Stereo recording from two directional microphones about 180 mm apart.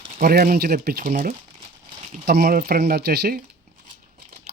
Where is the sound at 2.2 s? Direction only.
60° right (ahead or behind).